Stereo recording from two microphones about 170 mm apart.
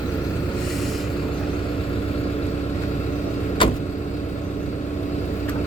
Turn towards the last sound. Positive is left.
turn(degrees=30)  # may be behind; listen again after turning